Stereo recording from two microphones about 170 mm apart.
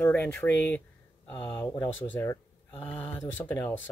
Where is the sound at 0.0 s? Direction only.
10° left (ahead or behind).